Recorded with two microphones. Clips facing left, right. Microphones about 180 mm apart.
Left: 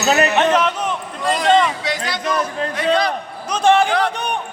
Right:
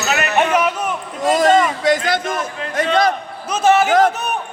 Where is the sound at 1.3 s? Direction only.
45° right (ahead or behind).